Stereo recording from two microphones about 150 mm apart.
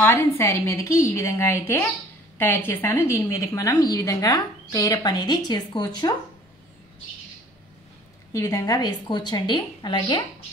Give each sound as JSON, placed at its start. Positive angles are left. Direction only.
{"t": 0.0, "sound": "a woman's voice", "side_deg": 15}
{"t": 8.3, "sound": "a woman's voice", "side_deg": 20}